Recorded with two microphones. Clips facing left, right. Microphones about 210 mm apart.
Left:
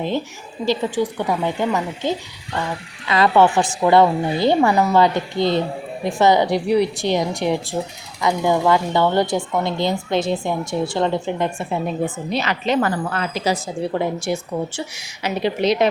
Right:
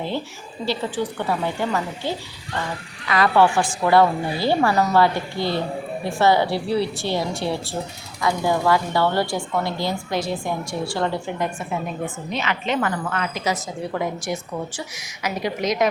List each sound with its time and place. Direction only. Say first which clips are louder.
0.6 s a woman's voice: left 5 dB; 15° left (ahead or behind)